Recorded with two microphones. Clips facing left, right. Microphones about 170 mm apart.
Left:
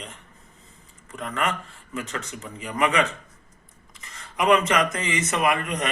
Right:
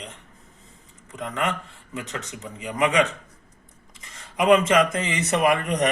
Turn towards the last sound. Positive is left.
turn(degrees=-35)  # may be behind; listen again after turning